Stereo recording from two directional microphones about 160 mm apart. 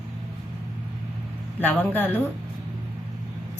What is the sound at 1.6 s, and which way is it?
Speech, 10° left (ahead or behind).